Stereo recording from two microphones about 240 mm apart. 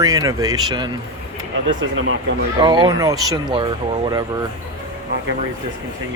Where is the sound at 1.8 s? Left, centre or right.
Right.